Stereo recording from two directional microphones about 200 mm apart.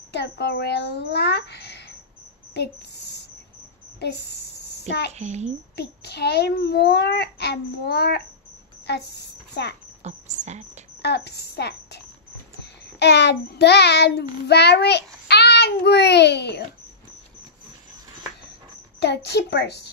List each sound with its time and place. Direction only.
0.1 s a child's voice: 55° left (ahead or behind)
5.1 s a child's voice: 35° right (ahead or behind)
5.8 s a child's voice: 55° left (ahead or behind)
10.0 s cricket: 35° right (ahead or behind)
11.0 s speech: 55° left (ahead or behind)
13.0 s a child's voice: 60° left (ahead or behind)
18.9 s a child's voice: 55° left (ahead or behind)